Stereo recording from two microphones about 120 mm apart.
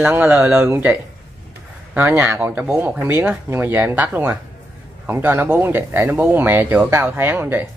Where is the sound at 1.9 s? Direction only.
20° right (ahead or behind).